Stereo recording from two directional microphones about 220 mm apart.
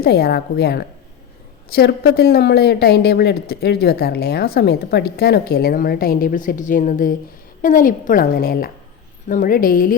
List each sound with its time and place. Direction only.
0.0 s a woman's voice: 45° left (ahead or behind)